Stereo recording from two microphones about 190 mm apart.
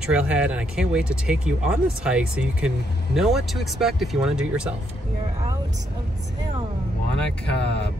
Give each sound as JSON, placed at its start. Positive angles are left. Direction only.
{"t": 0.0, "sound": "speech", "side_deg": -5}
{"t": 7.1, "sound": "speech", "side_deg": 5}